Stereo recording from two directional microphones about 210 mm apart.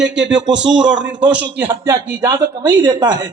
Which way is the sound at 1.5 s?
10° right (ahead or behind).